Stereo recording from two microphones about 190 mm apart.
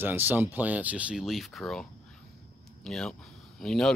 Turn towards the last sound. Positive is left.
turn(degrees=5)  # may be behind; listen again after turning